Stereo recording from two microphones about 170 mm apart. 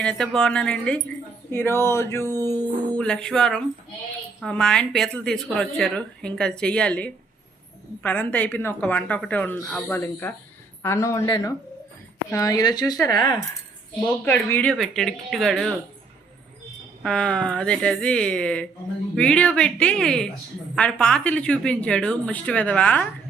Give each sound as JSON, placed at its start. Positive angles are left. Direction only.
{"t": 0.0, "sound": "speech", "side_deg": 5}
{"t": 14.3, "sound": "speech", "side_deg": 10}
{"t": 17.0, "sound": "speech", "side_deg": 5}